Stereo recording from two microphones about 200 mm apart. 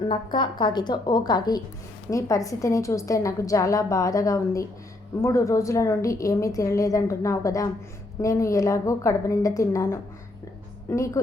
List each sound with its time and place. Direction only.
0.1 s a woman's voice: 25° left (ahead or behind)